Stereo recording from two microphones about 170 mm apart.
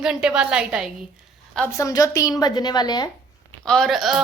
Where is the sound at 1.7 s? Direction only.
20° left (ahead or behind).